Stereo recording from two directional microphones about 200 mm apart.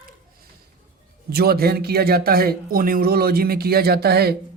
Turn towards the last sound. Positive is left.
turn(degrees=-50)  # may be behind; listen again after turning